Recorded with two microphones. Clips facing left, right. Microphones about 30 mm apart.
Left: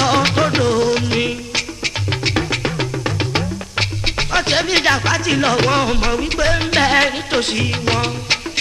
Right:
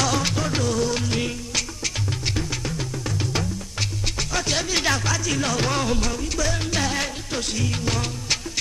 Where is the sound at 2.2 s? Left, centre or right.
Left.